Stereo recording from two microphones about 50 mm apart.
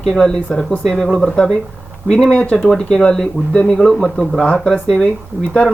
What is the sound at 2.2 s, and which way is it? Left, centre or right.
Speech, centre.